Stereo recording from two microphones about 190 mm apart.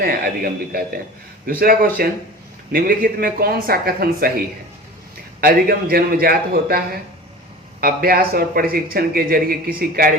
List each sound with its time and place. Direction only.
0.0 s speech: 50° right (ahead or behind)
5.4 s speech: 50° right (ahead or behind)